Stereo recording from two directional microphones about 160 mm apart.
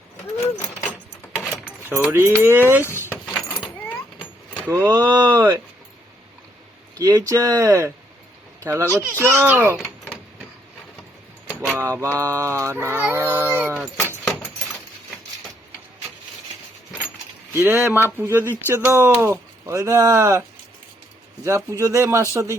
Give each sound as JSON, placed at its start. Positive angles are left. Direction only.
{"t": 0.3, "sound": "a sound", "side_deg": 20}
{"t": 1.5, "sound": "speech", "side_deg": -5}
{"t": 2.8, "sound": "a sound", "side_deg": 15}
{"t": 4.7, "sound": "speech", "side_deg": -15}
{"t": 6.9, "sound": "speech", "side_deg": -20}
{"t": 10.0, "sound": "a sound", "side_deg": -5}
{"t": 11.4, "sound": "keys jangling", "side_deg": -10}
{"t": 12.2, "sound": "speech", "side_deg": -15}
{"t": 17.5, "sound": "speech", "side_deg": -15}
{"t": 21.4, "sound": "speech", "side_deg": -20}